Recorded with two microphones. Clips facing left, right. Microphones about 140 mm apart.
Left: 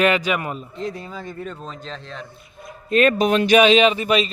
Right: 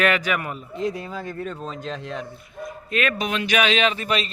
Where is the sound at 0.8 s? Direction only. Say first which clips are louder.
Right 2 dB; 10° right (ahead or behind).